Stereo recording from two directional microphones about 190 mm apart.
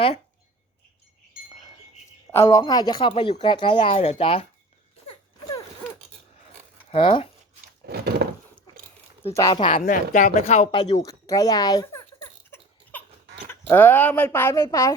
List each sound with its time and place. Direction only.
2.3 s speech: 15° left (ahead or behind)
5.0 s wail: 20° left (ahead or behind)
6.9 s speech: 25° left (ahead or behind)
7.9 s wood: 60° right (ahead or behind)
9.3 s a woman's voice: 20° left (ahead or behind)
10.8 s a sound: 20° left (ahead or behind)
13.5 s speech: 10° left (ahead or behind)